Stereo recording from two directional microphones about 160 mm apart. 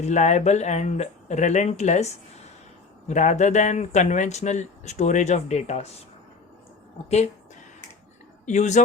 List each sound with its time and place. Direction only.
0.0 s speech: 45° left (ahead or behind)
8.4 s speech: 50° left (ahead or behind)